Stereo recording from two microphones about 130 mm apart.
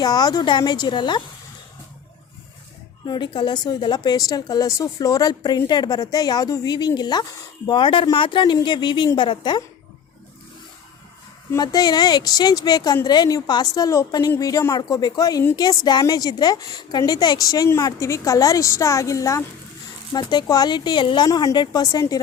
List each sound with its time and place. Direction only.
0.0 s a woman's voice: 30° left (ahead or behind)
3.1 s a woman's voice: 35° left (ahead or behind)
11.5 s a woman's voice: 30° left (ahead or behind)